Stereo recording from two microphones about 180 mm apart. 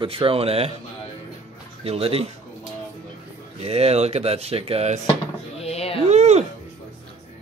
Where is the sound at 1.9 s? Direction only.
30° right (ahead or behind).